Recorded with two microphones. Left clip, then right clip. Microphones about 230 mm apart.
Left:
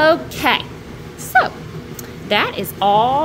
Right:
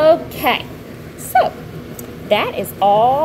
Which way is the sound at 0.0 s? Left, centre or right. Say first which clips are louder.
Right 2 dB; left.